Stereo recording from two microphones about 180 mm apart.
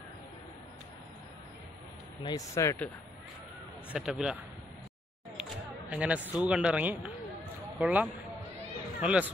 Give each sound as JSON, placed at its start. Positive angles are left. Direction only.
{"t": 2.2, "sound": "speech", "side_deg": 20}
{"t": 3.9, "sound": "speech", "side_deg": -5}
{"t": 5.4, "sound": "speech", "side_deg": -5}